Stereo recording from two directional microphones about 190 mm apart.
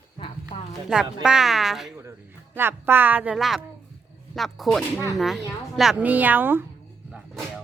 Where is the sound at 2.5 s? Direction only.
10° right (ahead or behind).